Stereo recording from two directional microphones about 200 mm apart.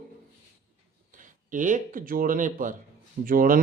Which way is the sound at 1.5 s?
40° right (ahead or behind).